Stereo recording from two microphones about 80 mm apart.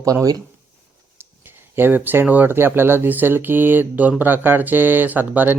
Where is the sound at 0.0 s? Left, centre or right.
Right.